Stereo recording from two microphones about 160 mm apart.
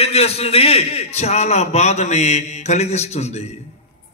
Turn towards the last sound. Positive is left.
turn(degrees=40)  # may be behind; listen again after turning